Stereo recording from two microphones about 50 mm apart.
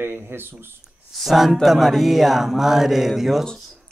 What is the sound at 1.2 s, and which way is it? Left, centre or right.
Speech, centre.